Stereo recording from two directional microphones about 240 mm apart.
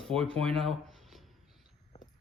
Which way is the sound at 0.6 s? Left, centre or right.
Centre.